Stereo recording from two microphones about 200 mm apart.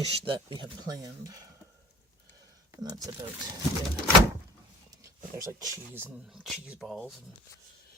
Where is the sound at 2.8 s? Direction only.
20° right (ahead or behind).